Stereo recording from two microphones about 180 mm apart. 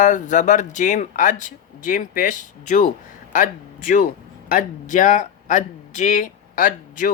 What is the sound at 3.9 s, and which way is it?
Speech, 50° left (ahead or behind).